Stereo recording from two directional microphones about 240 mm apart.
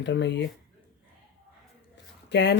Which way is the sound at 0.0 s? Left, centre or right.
Left.